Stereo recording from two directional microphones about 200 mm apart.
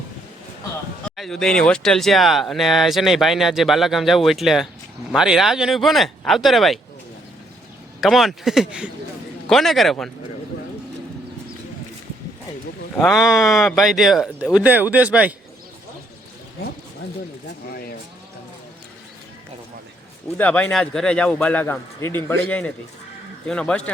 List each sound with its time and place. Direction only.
1.1 s speech: centre (ahead or behind)
8.0 s speech: centre (ahead or behind)
13.0 s speech: centre (ahead or behind)
17.7 s speech: 50° left (ahead or behind)
20.2 s a man's voice: 5° left (ahead or behind)